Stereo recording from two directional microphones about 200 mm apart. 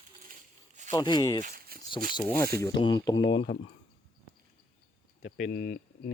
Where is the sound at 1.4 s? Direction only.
45° right (ahead or behind).